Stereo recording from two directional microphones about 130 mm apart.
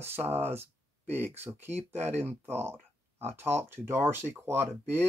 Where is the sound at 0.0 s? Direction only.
15° right (ahead or behind).